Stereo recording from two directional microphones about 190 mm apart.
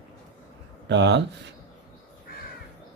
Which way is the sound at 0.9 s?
65° right (ahead or behind).